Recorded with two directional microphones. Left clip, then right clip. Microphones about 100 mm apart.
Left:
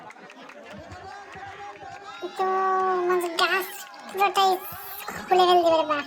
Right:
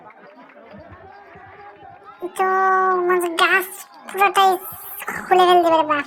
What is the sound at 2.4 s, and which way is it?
Speech, 40° right (ahead or behind).